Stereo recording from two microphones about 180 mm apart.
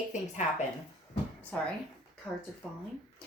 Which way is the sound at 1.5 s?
10° left (ahead or behind).